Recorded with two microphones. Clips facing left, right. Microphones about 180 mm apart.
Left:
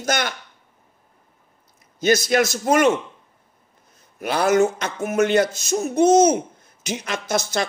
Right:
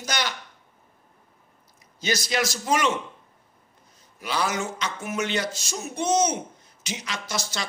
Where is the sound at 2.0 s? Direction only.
55° left (ahead or behind).